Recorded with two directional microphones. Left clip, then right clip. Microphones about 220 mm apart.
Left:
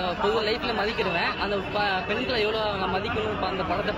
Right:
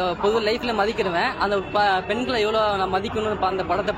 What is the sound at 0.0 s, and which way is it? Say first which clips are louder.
Speech: right 4 dB; 50° right (ahead or behind).